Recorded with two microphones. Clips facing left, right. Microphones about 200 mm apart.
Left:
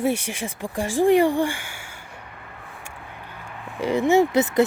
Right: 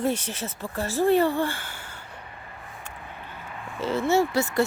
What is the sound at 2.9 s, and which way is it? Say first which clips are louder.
Vehicle: left 1 dB; 10° left (ahead or behind).